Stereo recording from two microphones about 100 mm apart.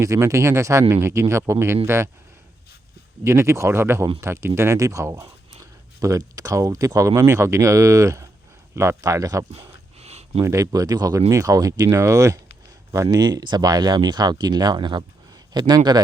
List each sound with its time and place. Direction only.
0.0 s speech: 30° right (ahead or behind)
3.2 s speech: 30° right (ahead or behind)
10.0 s a sound: 90° right
10.4 s speech: 30° right (ahead or behind)
13.1 s speech: 45° right (ahead or behind)